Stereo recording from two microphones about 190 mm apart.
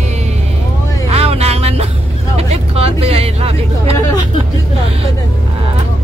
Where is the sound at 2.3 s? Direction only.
30° right (ahead or behind).